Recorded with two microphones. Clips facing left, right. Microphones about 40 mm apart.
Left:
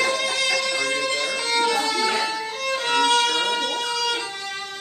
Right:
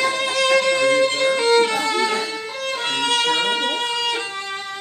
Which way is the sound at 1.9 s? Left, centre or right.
Right.